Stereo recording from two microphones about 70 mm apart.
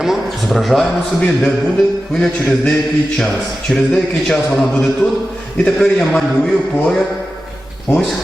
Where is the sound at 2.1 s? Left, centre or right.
Centre.